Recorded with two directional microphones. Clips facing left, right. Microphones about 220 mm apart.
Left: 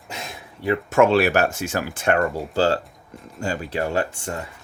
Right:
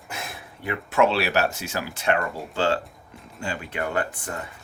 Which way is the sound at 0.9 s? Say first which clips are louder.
Left 4 dB; 50° left (ahead or behind).